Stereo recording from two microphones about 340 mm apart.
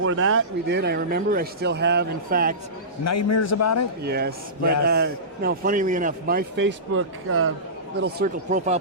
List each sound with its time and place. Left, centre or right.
0.0 s a man's voice: right
3.0 s a man's voice: left
4.0 s a man's voice: right
8.0 s a man's voice: right